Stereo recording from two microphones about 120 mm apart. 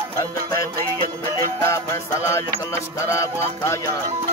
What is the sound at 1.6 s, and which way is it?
Music, 25° left (ahead or behind).